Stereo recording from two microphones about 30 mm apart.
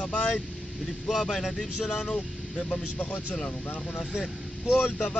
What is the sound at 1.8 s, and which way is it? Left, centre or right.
Speech, left.